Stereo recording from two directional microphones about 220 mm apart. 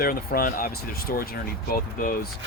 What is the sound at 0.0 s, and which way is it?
Speech, 40° left (ahead or behind).